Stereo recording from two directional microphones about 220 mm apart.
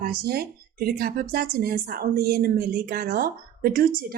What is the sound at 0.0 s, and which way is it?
A woman's voice, 45° right (ahead or behind).